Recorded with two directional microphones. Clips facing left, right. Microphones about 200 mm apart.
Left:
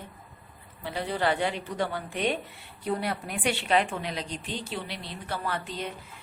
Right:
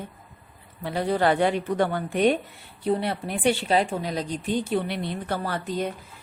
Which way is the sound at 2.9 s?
25° right (ahead or behind).